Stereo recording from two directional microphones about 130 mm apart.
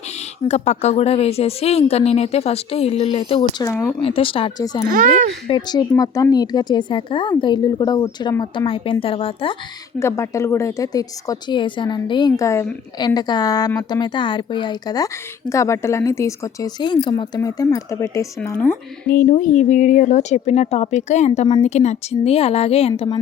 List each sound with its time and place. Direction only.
0.4 s speech: 60° left (ahead or behind)
3.6 s a woman's voice: 20° left (ahead or behind)
4.0 s speech: 45° left (ahead or behind)
4.9 s speech: 90° right
5.5 s speech: 35° left (ahead or behind)
7.8 s speech: 25° left (ahead or behind); by 9.6 s 45° left (ahead or behind)
10.0 s a woman's voice: 20° left (ahead or behind)
19.3 s a woman's voice: 75° left (ahead or behind); by 23.0 s 50° left (ahead or behind)